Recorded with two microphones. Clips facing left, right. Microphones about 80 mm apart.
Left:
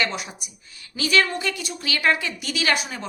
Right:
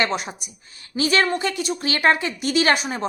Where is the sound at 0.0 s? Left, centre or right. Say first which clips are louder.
Right 3 dB; right.